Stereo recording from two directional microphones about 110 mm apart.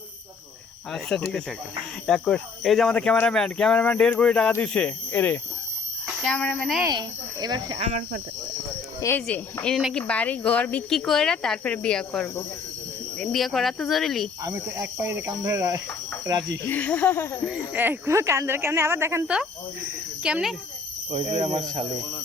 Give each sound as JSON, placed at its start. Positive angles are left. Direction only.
{"t": 1.1, "sound": "speech", "side_deg": 10}
{"t": 6.9, "sound": "speech", "side_deg": -40}
{"t": 9.1, "sound": "speech", "side_deg": 15}
{"t": 14.4, "sound": "speech", "side_deg": -30}
{"t": 16.6, "sound": "speech", "side_deg": 15}
{"t": 17.7, "sound": "speech", "side_deg": -20}
{"t": 20.2, "sound": "speech", "side_deg": -5}
{"t": 21.1, "sound": "speech", "side_deg": -90}